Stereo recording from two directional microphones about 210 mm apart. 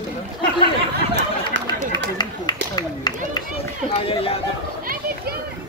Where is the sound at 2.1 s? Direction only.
20° left (ahead or behind).